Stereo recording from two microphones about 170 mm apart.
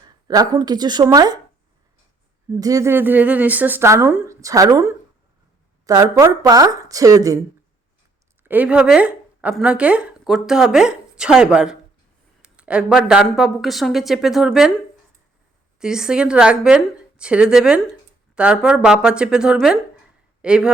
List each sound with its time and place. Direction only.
0.3 s speech: 20° right (ahead or behind)
2.5 s speech: 20° right (ahead or behind)
8.4 s speech: 10° right (ahead or behind)
15.8 s speech: 5° right (ahead or behind)